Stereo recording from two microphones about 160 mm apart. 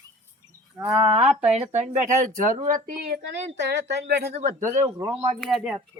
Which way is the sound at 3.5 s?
90° right.